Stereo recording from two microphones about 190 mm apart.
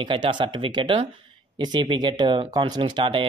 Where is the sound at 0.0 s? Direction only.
25° right (ahead or behind).